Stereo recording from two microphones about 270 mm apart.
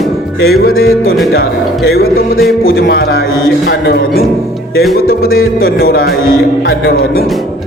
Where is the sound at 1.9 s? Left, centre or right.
Left.